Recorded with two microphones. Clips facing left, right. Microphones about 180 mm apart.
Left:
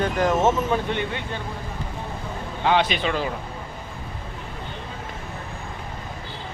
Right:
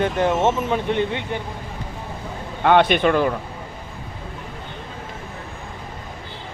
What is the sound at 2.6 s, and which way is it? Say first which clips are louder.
Speech: right 6 dB; 55° right (ahead or behind).